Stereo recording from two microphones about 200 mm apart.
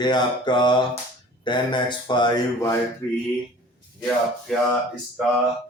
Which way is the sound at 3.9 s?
5° left (ahead or behind).